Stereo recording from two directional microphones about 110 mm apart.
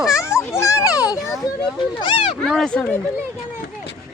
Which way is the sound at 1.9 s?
50° left (ahead or behind).